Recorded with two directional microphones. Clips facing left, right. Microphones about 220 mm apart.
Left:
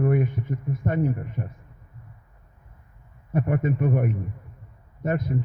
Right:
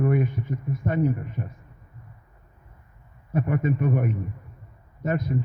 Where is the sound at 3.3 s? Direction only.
50° left (ahead or behind).